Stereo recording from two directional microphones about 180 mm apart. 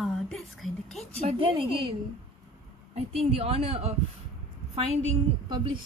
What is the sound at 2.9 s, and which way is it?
A woman's voice, 35° right (ahead or behind).